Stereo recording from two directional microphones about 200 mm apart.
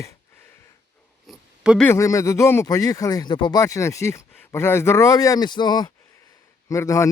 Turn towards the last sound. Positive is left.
turn(degrees=15)  # may be behind; listen again after turning